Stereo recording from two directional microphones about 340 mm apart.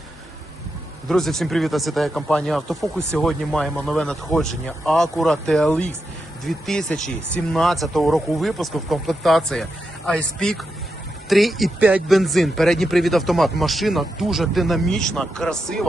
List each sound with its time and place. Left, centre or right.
1.0 s speech: centre